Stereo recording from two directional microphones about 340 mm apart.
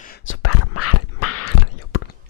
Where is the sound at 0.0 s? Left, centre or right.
Left.